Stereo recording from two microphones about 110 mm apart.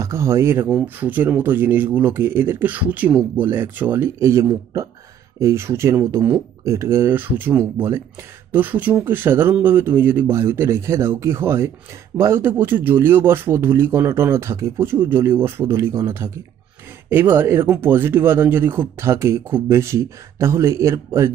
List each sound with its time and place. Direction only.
0.0 s speech: 25° right (ahead or behind)